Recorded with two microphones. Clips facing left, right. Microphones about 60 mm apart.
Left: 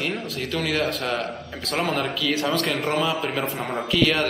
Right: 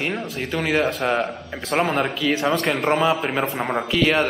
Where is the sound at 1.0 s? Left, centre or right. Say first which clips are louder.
Right 5 dB; right.